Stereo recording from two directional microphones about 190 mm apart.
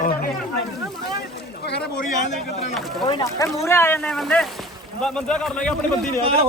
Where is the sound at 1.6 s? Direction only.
60° left (ahead or behind).